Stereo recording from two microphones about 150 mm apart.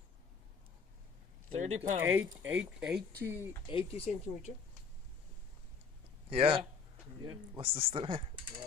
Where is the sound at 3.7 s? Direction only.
40° left (ahead or behind).